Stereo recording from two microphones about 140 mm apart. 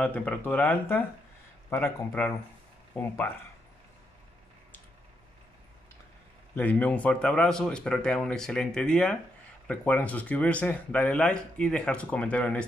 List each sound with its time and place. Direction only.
0.0 s speech: 10° left (ahead or behind)
6.5 s speech: 10° left (ahead or behind)